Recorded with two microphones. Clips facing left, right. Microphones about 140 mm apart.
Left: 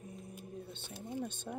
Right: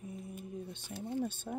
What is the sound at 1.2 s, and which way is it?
Speech, 5° right (ahead or behind).